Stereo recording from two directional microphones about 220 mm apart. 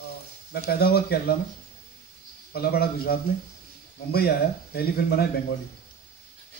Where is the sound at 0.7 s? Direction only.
45° left (ahead or behind).